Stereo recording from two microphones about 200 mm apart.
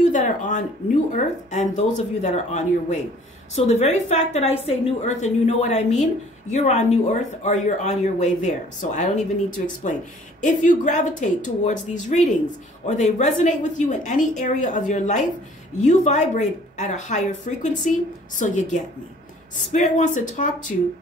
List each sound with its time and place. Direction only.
0.0 s a sound: 40° left (ahead or behind)
1.1 s speech: 35° left (ahead or behind)
10.4 s speech: 40° left (ahead or behind)